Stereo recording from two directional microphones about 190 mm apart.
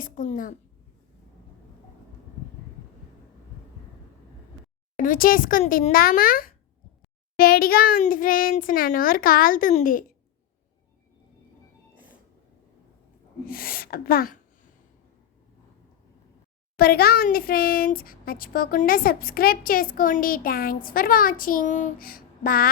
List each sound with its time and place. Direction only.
0.0 s a sound: 45° left (ahead or behind)
4.9 s speech: 45° left (ahead or behind)
13.4 s speech: 50° left (ahead or behind)
16.7 s speech: 55° left (ahead or behind)